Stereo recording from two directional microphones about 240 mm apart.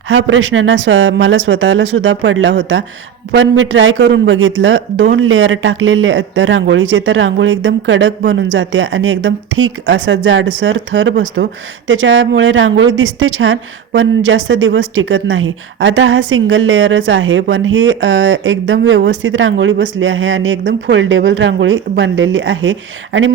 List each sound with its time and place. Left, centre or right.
0.1 s speech: right